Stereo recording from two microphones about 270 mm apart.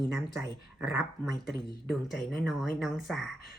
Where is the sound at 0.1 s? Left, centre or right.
Centre.